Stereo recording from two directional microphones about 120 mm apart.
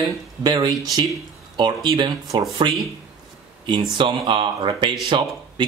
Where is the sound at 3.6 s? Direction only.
40° right (ahead or behind).